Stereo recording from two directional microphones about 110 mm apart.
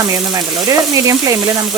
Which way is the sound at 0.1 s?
30° right (ahead or behind).